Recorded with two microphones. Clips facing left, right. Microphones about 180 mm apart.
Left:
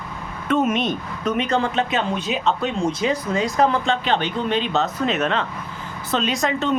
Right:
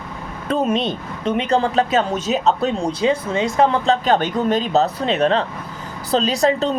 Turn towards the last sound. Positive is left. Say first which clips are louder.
# right 4 dB
turn(degrees=-35)  # may be behind; listen again after turning